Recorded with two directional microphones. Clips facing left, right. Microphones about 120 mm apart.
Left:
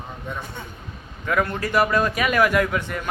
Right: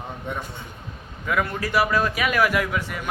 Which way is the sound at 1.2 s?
Centre (ahead or behind).